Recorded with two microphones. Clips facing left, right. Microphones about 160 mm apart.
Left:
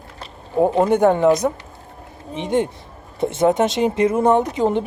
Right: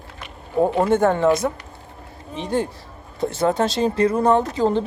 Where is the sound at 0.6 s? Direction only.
20° left (ahead or behind).